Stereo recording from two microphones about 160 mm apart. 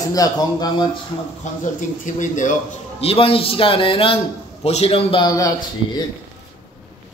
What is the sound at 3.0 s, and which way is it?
A man's voice, 35° left (ahead or behind).